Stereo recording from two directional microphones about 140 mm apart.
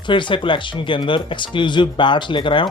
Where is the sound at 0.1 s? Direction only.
35° left (ahead or behind).